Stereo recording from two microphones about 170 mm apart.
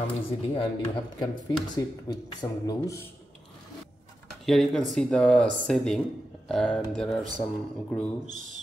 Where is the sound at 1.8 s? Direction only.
20° left (ahead or behind).